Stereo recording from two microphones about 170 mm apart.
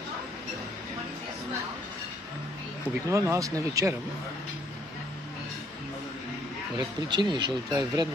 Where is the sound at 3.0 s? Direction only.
20° right (ahead or behind).